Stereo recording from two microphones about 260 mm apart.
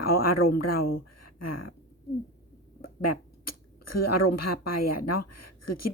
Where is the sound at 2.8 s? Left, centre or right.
Left.